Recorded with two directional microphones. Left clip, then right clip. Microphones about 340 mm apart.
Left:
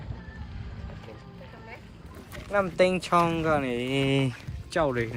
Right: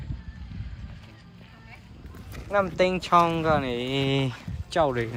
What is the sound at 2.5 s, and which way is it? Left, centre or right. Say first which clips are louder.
Speech: even; centre.